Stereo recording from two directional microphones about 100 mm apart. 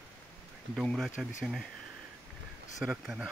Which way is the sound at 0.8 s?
Centre (ahead or behind).